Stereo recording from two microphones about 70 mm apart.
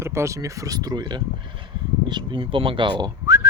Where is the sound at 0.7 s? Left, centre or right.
Right.